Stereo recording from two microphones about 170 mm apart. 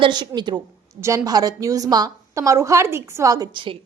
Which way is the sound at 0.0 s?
25° right (ahead or behind).